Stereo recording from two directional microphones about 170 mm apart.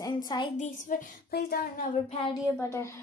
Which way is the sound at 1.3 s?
65° left (ahead or behind).